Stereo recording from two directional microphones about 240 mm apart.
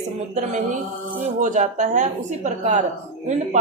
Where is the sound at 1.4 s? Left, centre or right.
Right.